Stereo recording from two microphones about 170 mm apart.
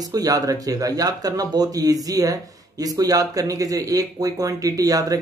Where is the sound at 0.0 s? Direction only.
20° right (ahead or behind).